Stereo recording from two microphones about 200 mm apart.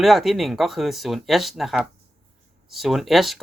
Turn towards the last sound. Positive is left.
turn(degrees=0)  # may be behind; listen again after turning